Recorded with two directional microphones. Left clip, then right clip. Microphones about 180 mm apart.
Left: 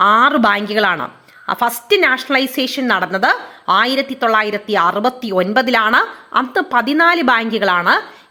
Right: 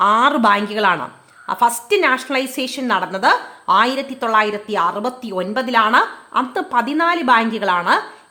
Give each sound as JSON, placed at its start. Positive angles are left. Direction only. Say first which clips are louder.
{"t": 0.0, "sound": "a woman's voice", "louder": "left 2 dB", "side_deg": 10}